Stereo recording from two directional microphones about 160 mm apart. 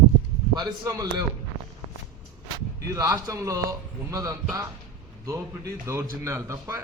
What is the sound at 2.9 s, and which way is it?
A man's voice, 20° right (ahead or behind).